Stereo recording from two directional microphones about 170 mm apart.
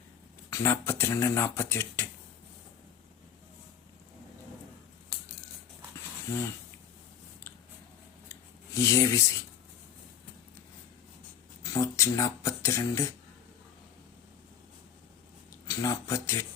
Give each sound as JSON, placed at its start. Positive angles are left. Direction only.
{"t": 0.5, "sound": "speech", "side_deg": 15}
{"t": 8.3, "sound": "a sound", "side_deg": 20}
{"t": 11.6, "sound": "speech", "side_deg": 20}
{"t": 15.6, "sound": "speech", "side_deg": 20}